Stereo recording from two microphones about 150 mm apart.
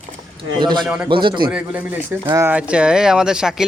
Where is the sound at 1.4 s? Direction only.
10° right (ahead or behind).